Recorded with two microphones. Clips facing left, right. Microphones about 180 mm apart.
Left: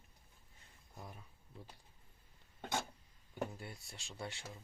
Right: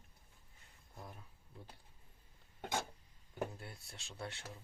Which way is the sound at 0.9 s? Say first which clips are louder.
Even; centre (ahead or behind).